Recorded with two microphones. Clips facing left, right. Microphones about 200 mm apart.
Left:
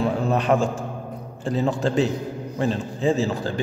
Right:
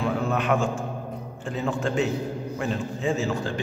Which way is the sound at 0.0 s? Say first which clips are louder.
Left 3 dB; 35° left (ahead or behind).